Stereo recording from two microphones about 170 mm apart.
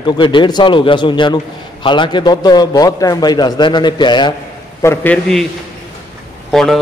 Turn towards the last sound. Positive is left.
turn(degrees=0)  # may be behind; listen again after turning